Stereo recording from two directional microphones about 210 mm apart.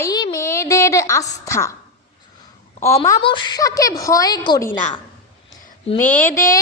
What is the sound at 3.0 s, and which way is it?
A woman's voice, 20° left (ahead or behind).